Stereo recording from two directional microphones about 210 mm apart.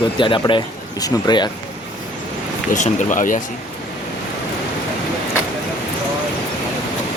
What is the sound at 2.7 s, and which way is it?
Speech, 35° left (ahead or behind).